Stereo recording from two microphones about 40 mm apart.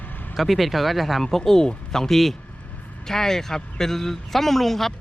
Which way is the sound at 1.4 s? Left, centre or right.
Centre.